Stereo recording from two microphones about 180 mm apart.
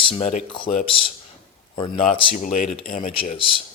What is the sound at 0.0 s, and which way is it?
Speech, 35° left (ahead or behind).